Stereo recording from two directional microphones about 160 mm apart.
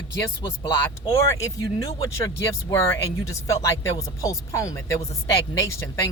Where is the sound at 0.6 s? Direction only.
15° left (ahead or behind).